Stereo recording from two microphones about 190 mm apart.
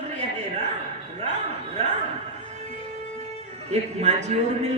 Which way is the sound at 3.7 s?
35° right (ahead or behind).